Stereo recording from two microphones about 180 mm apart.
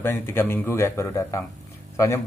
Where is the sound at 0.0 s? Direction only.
10° left (ahead or behind).